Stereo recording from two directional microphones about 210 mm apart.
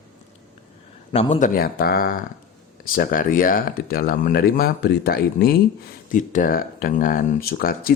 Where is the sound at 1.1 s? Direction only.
30° left (ahead or behind).